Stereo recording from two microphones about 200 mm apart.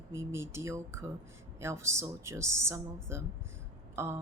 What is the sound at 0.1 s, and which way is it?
A woman's voice, 15° right (ahead or behind).